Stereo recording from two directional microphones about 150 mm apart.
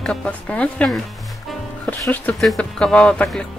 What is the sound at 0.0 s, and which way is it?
Speech, 5° left (ahead or behind).